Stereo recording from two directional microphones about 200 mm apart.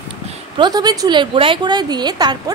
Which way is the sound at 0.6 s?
20° right (ahead or behind).